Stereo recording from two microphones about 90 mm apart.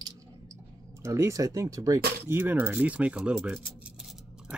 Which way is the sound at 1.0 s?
35° right (ahead or behind).